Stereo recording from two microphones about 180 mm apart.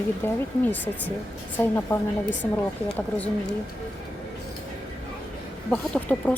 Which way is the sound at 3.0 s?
10° left (ahead or behind).